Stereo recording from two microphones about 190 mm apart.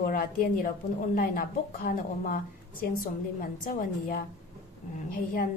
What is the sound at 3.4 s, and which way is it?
Speech, 45° left (ahead or behind).